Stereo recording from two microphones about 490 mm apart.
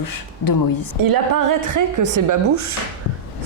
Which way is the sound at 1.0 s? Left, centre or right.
Right.